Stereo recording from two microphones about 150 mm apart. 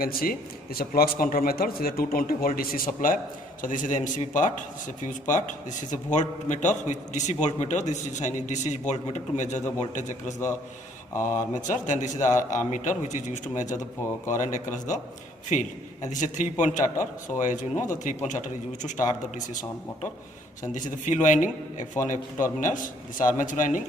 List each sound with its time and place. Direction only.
0.0 s a man's voice: 80° left; by 10.5 s 55° left (ahead or behind)
11.1 s speech: 20° left (ahead or behind)
11.3 s a man's voice: 55° left (ahead or behind)
21.0 s a man's voice: 55° left (ahead or behind)